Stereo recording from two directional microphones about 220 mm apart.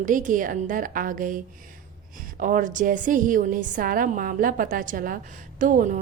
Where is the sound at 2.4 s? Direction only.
35° right (ahead or behind).